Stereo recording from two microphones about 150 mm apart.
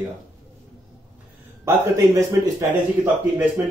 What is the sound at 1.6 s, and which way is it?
Speech, 20° right (ahead or behind).